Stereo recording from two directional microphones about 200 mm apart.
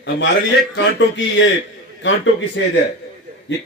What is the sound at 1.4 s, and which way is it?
Speech, 65° left (ahead or behind).